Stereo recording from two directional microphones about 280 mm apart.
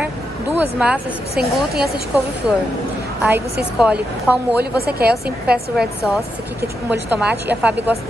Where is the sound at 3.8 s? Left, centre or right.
Centre.